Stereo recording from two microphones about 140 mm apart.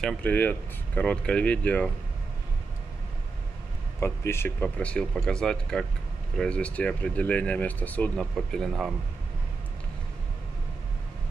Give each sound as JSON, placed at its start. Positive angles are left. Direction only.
{"t": 0.0, "sound": "speech", "side_deg": 10}
{"t": 4.0, "sound": "speech", "side_deg": 20}
{"t": 4.6, "sound": "speech", "side_deg": 5}